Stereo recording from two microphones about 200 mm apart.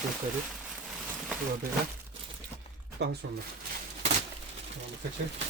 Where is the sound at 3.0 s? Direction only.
55° right (ahead or behind).